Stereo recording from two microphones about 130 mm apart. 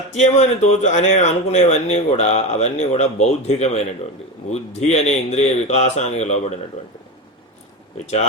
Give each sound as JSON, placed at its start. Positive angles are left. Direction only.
{"t": 0.1, "sound": "speech", "side_deg": 65}
{"t": 8.0, "sound": "speech", "side_deg": 60}